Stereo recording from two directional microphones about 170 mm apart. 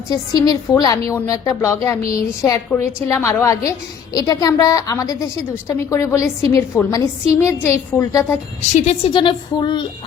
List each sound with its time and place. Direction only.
0.1 s a woman's voice: 20° left (ahead or behind)
8.7 s a woman's voice: 40° left (ahead or behind)